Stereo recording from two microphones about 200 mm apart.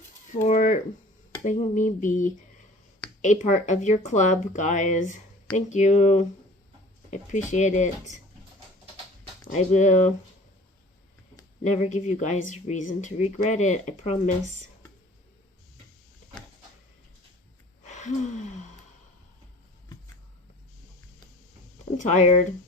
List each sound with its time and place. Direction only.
0.4 s speech: 40° left (ahead or behind)
9.5 s speech: 35° left (ahead or behind)
11.6 s speech: 35° left (ahead or behind)
17.8 s gasp: 35° left (ahead or behind)
21.9 s speech: 35° left (ahead or behind)